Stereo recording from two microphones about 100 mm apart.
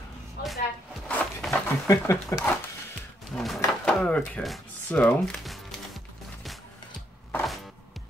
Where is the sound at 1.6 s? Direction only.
30° left (ahead or behind).